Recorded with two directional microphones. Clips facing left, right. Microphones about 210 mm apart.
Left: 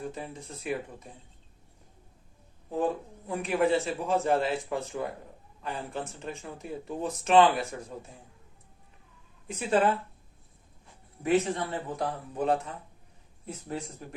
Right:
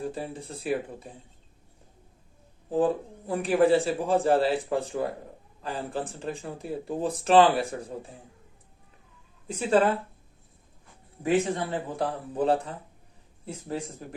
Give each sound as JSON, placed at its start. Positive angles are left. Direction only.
{"t": 0.0, "sound": "a man's voice", "side_deg": -35}
{"t": 2.6, "sound": "a man's voice", "side_deg": -30}
{"t": 9.6, "sound": "a man's voice", "side_deg": -35}
{"t": 11.3, "sound": "a man's voice", "side_deg": -30}